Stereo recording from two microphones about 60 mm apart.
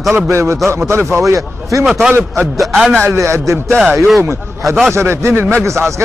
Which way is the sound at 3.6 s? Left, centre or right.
Centre.